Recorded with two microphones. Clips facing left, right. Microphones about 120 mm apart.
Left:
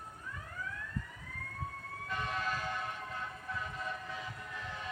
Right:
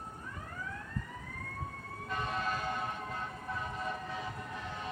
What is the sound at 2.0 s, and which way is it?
Vehicle, 30° right (ahead or behind).